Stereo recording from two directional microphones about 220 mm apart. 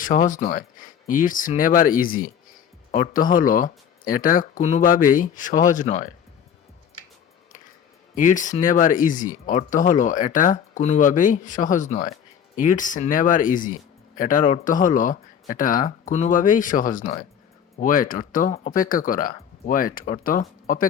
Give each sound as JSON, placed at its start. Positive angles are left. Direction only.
{"t": 0.0, "sound": "speech", "side_deg": 35}
{"t": 8.1, "sound": "speech", "side_deg": 35}